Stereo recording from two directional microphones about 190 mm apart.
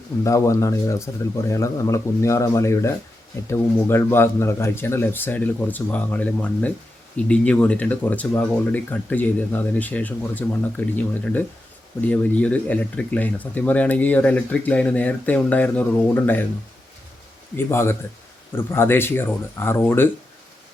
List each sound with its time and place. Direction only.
0.3 s speech: 15° left (ahead or behind)
17.6 s speech: 15° left (ahead or behind)